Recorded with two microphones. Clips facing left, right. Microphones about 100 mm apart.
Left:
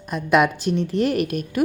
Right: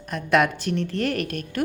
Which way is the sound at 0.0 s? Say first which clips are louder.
Left 3 dB; 15° left (ahead or behind).